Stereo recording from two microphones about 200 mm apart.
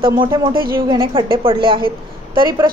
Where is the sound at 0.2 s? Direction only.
25° right (ahead or behind).